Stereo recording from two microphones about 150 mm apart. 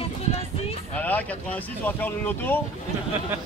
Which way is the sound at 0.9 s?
10° left (ahead or behind).